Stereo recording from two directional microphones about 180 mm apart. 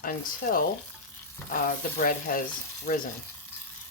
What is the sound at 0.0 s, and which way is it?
A woman's voice, 50° left (ahead or behind).